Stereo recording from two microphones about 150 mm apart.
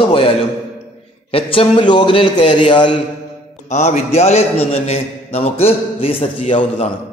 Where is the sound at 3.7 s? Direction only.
50° left (ahead or behind).